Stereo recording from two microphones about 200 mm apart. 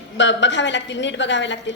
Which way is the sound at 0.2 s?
65° left (ahead or behind).